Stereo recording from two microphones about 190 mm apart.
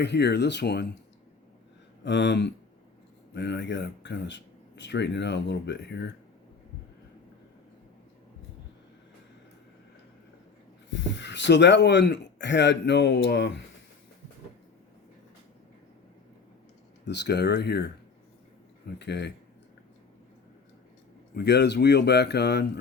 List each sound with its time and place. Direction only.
0.0 s speech: 60° left (ahead or behind)
2.0 s speech: 65° left (ahead or behind)
10.9 s speech: 65° left (ahead or behind)
17.1 s speech: 60° left (ahead or behind)
18.9 s speech: 65° left (ahead or behind)
21.3 s speech: 60° left (ahead or behind)